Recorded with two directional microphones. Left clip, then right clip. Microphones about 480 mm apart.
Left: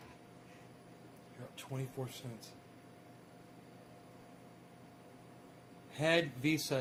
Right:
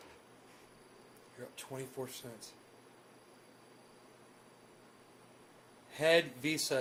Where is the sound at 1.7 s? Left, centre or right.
Centre.